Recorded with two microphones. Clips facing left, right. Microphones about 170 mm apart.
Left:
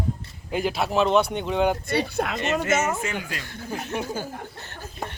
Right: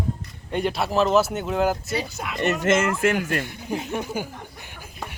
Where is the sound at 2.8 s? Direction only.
90° right.